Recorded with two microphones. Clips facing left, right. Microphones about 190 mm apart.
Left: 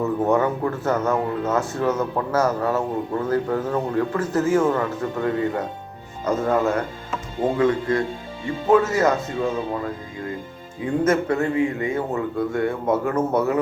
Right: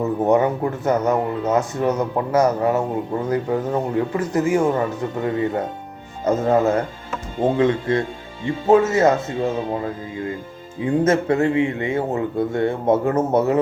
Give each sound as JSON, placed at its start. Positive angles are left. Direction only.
{"t": 0.0, "sound": "speech", "side_deg": -20}
{"t": 11.0, "sound": "speech", "side_deg": -25}